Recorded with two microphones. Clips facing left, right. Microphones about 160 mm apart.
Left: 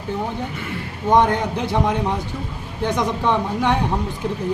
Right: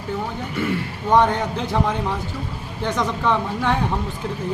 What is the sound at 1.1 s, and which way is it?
A man's voice, 15° left (ahead or behind).